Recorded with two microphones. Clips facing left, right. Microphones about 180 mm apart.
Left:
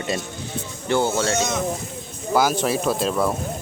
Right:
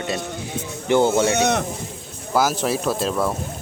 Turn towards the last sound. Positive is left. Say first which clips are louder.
# left 1 dB
turn(degrees=0)  # may be behind; listen again after turning